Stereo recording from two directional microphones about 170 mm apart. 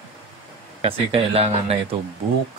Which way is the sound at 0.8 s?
35° right (ahead or behind).